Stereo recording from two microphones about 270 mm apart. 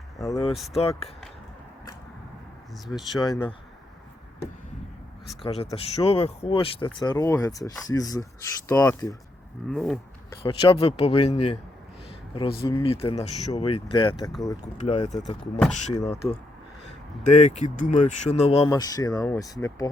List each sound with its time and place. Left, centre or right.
0.2 s speech: centre
0.5 s speech: centre
0.8 s speech: left
2.8 s speech: centre
3.2 s speech: centre
5.4 s speech: left
9.6 s speech: centre
10.4 s speech: centre
17.2 s speech: left